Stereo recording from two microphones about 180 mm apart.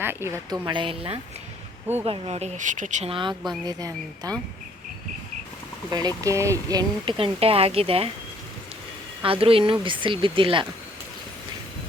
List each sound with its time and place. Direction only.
0.0 s a woman's voice: 15° right (ahead or behind)
0.6 s speech: 25° right (ahead or behind)
5.9 s speech: 20° right (ahead or behind)
9.2 s speech: 30° right (ahead or behind)